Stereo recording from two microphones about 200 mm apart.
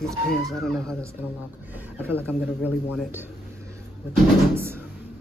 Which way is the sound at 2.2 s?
10° right (ahead or behind).